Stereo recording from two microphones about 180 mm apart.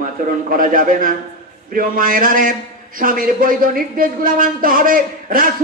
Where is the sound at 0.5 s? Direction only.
50° right (ahead or behind).